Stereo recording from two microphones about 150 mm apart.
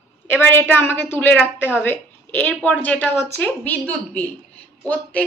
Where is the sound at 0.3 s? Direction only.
15° left (ahead or behind).